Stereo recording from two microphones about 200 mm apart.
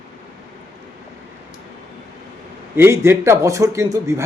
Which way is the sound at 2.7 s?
15° right (ahead or behind).